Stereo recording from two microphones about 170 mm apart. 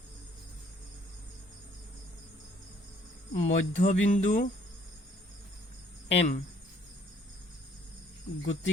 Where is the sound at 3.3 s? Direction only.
45° left (ahead or behind).